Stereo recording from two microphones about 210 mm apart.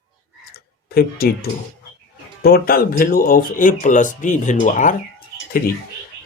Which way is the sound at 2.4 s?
45° left (ahead or behind).